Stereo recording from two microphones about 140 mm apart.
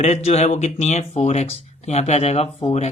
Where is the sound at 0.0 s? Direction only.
50° left (ahead or behind).